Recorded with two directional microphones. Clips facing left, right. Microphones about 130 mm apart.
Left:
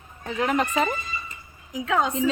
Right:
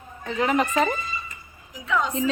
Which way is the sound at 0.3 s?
Centre (ahead or behind).